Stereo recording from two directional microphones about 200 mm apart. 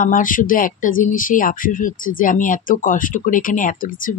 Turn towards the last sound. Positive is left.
turn(degrees=40)  # may be behind; listen again after turning